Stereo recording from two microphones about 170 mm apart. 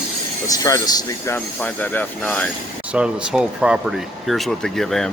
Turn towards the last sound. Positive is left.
turn(degrees=0)  # may be behind; listen again after turning